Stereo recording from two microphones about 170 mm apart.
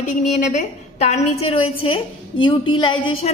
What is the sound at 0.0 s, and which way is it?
A woman's voice, 45° left (ahead or behind).